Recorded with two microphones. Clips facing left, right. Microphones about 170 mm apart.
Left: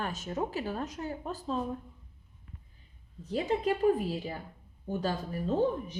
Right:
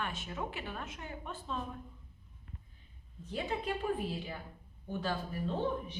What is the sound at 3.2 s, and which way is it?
A woman's voice, 40° left (ahead or behind).